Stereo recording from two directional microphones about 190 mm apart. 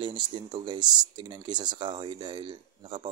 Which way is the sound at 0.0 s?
25° right (ahead or behind).